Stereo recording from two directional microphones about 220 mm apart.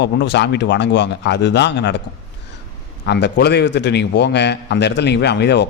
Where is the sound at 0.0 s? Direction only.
50° left (ahead or behind).